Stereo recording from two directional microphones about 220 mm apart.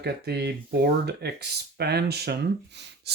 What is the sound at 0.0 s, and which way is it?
Speech, 45° right (ahead or behind).